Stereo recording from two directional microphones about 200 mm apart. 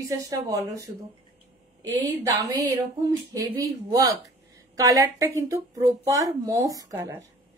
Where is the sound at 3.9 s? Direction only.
15° right (ahead or behind).